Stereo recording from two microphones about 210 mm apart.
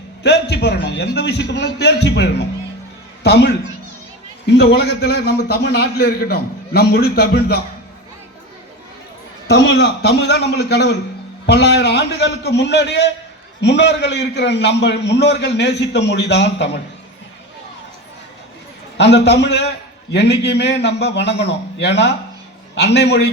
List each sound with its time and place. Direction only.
0.2 s a man's voice: 55° left (ahead or behind)
9.5 s a man's voice: 55° left (ahead or behind)
18.9 s a man's voice: 55° left (ahead or behind)